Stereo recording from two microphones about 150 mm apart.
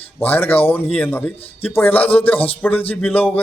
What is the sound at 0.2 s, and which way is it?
Speech, 10° left (ahead or behind).